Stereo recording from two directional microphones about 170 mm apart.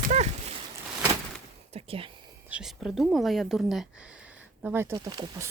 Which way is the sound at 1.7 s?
35° right (ahead or behind).